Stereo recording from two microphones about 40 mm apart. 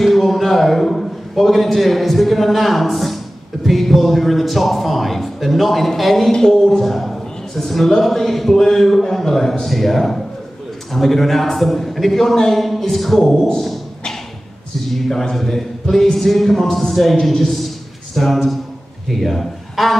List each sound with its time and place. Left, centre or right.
0.0 s a man's voice: centre
6.3 s a man's voice: centre
14.9 s a man's voice: centre